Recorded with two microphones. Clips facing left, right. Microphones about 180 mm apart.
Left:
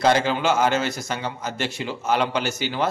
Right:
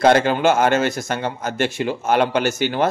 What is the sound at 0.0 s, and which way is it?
A man's voice, 55° right (ahead or behind).